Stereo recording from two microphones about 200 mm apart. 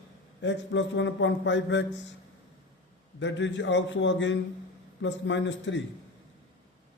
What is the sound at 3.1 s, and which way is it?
A man's voice, 65° left (ahead or behind).